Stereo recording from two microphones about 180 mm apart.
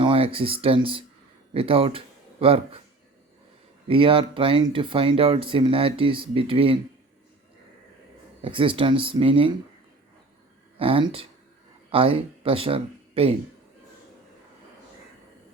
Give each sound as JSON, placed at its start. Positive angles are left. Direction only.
{"t": 0.0, "sound": "speech", "side_deg": -30}
{"t": 3.8, "sound": "speech", "side_deg": -30}
{"t": 8.4, "sound": "speech", "side_deg": -30}
{"t": 10.8, "sound": "speech", "side_deg": -30}